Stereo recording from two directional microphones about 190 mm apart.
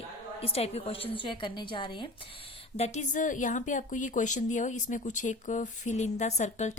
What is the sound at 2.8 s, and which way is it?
Speech, 40° left (ahead or behind).